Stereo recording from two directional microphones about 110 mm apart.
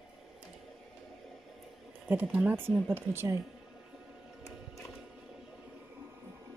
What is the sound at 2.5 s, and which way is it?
Speech, 20° right (ahead or behind).